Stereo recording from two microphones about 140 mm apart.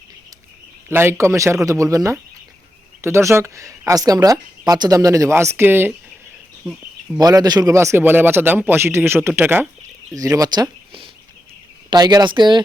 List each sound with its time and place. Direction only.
0.9 s a man's voice: 15° right (ahead or behind)
10.2 s speech: 25° right (ahead or behind)